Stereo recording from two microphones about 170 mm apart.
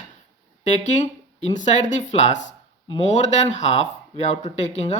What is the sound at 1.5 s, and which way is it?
Speech, 45° left (ahead or behind).